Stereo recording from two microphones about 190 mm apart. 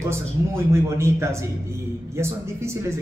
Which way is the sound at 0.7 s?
15° right (ahead or behind).